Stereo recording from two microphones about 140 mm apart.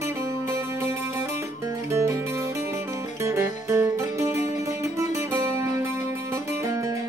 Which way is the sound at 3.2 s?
20° right (ahead or behind).